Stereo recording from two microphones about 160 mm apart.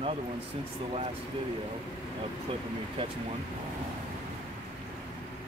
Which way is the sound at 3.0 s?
35° right (ahead or behind).